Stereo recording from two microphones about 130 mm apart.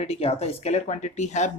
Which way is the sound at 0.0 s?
50° left (ahead or behind).